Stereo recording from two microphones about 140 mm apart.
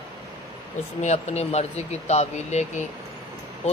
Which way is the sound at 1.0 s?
55° left (ahead or behind).